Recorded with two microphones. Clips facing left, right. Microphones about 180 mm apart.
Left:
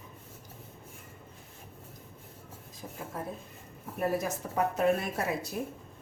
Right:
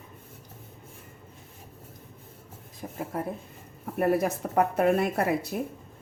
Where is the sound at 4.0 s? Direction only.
60° right (ahead or behind).